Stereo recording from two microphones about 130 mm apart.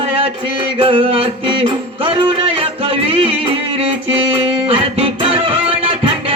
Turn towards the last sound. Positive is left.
turn(degrees=-45)  # may be behind; listen again after turning